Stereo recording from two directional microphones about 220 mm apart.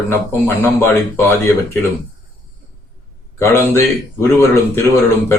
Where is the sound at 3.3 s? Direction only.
10° left (ahead or behind).